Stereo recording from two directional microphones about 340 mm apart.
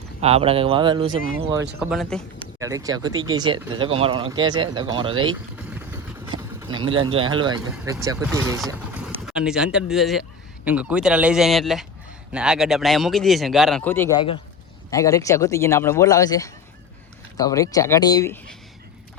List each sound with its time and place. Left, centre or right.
0.2 s speech: centre
1.8 s speech: centre
2.6 s speech: centre
8.6 s vehicle: centre
9.2 s speech: centre